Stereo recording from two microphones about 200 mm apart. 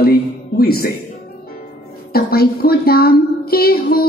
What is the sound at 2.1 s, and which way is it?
A woman's voice, 50° left (ahead or behind).